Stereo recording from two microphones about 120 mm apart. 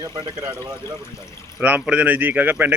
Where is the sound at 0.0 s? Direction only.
30° right (ahead or behind).